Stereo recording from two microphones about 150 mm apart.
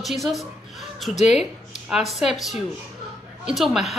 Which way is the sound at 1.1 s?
50° left (ahead or behind).